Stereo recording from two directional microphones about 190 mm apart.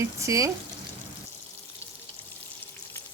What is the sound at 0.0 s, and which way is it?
Speech, 15° right (ahead or behind).